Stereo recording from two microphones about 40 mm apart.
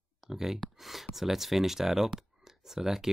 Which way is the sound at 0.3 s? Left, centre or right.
Centre.